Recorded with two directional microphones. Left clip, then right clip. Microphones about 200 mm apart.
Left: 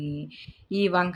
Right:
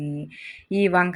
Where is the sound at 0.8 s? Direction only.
Centre (ahead or behind).